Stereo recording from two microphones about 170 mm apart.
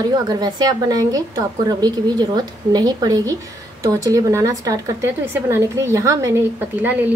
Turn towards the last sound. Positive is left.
turn(degrees=-10)  # may be behind; listen again after turning